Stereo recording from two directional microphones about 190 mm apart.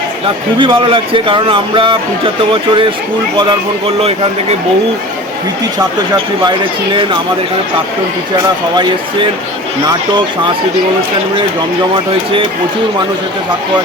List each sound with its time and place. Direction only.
0.6 s a man's voice: 25° right (ahead or behind)
6.9 s a man's voice: 25° right (ahead or behind)